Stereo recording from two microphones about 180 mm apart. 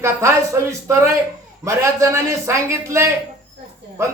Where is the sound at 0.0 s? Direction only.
15° right (ahead or behind).